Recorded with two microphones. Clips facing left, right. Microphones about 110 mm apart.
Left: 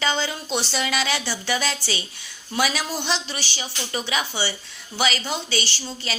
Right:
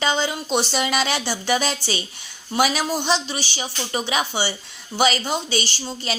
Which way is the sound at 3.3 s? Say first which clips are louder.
Right 3 dB; 15° right (ahead or behind).